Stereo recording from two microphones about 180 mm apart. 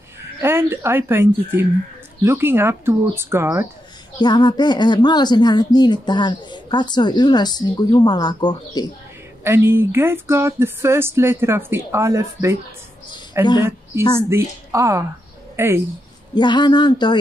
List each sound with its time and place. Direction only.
0.4 s speech: 15° right (ahead or behind)
4.2 s speech: 25° left (ahead or behind)
9.4 s speech: 15° right (ahead or behind)
16.3 s speech: 25° left (ahead or behind)